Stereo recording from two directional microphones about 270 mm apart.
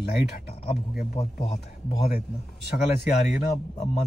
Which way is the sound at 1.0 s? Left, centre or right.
Left.